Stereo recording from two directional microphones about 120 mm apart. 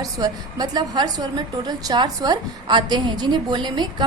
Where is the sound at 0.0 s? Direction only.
30° right (ahead or behind).